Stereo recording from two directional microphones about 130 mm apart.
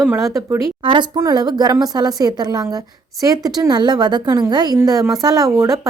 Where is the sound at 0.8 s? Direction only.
40° right (ahead or behind).